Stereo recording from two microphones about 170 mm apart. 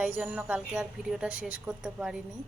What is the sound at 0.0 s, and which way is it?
A woman's voice, 5° right (ahead or behind).